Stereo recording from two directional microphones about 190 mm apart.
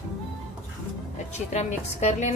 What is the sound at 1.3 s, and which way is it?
A woman's voice, 35° left (ahead or behind).